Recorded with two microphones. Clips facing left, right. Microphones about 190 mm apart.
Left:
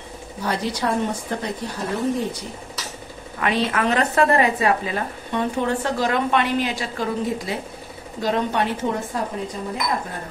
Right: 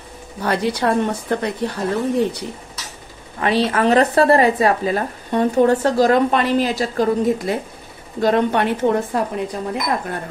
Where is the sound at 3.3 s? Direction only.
35° right (ahead or behind).